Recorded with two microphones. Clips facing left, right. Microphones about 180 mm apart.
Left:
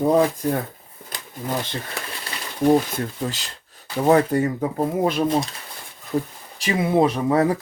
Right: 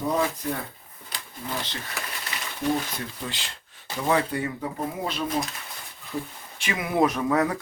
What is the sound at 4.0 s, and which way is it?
Speech, 45° left (ahead or behind).